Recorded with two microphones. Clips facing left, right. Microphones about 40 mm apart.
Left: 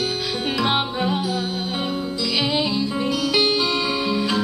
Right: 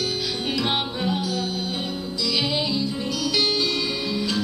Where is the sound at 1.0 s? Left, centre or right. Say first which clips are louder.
Left 3 dB; centre.